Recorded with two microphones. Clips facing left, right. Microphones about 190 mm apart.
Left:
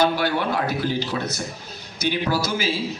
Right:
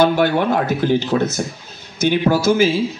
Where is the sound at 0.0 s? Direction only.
50° right (ahead or behind).